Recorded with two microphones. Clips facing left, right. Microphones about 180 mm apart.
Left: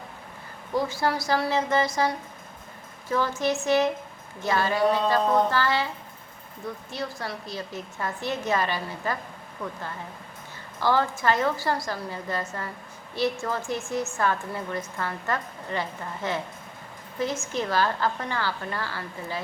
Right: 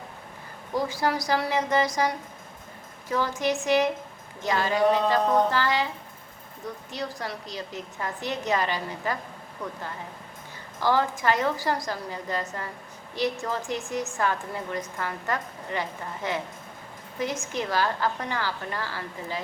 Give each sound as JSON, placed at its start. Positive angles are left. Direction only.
{"t": 0.7, "sound": "a woman's voice", "side_deg": -15}
{"t": 6.9, "sound": "a woman's voice", "side_deg": -15}
{"t": 10.8, "sound": "a woman's voice", "side_deg": -15}